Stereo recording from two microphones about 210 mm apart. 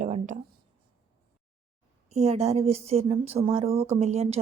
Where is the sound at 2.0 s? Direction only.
30° right (ahead or behind).